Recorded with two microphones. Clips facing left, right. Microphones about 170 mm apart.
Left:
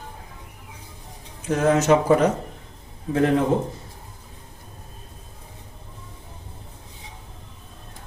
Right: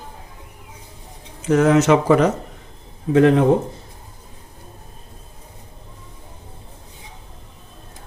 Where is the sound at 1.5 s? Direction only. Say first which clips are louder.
Right 4 dB; 80° right.